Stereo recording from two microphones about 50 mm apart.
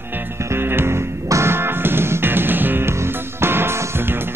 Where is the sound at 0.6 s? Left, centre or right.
Right.